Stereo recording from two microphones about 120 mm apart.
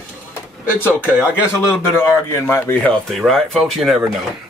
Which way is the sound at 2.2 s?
25° left (ahead or behind).